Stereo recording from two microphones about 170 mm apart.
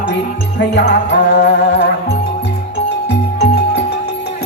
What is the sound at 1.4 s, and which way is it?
Music, 90° left.